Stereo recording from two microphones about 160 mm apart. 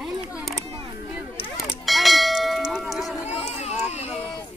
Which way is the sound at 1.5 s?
Centre (ahead or behind).